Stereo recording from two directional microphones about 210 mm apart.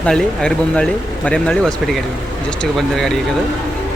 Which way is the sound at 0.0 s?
5° left (ahead or behind).